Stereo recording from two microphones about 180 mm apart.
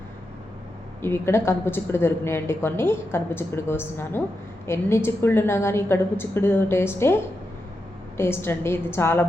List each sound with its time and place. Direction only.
1.0 s a woman's voice: 15° left (ahead or behind)